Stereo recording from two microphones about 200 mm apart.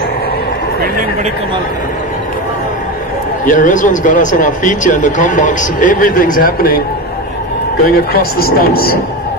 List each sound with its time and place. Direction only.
3.4 s speech: 40° left (ahead or behind)
7.8 s speech: 50° left (ahead or behind)